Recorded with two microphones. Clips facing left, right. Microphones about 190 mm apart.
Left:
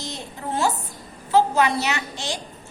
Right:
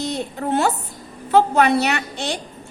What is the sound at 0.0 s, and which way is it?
A woman's voice, 65° right (ahead or behind).